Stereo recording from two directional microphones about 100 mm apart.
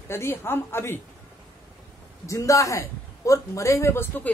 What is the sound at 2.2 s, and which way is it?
A man's voice, 30° left (ahead or behind).